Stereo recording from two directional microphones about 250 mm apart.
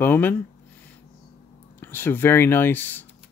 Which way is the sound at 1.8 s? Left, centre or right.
Centre.